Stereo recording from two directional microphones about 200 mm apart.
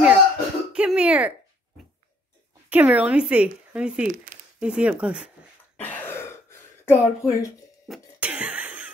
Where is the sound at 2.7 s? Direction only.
5° right (ahead or behind).